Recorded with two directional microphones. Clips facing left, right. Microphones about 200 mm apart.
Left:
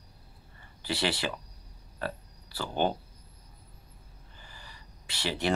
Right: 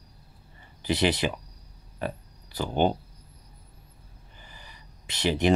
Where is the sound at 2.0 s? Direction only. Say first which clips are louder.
Right 3 dB; 15° right (ahead or behind).